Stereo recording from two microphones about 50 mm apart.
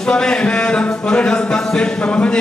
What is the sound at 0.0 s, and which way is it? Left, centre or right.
Speech, centre.